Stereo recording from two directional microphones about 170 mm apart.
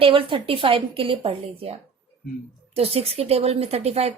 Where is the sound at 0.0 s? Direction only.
30° right (ahead or behind).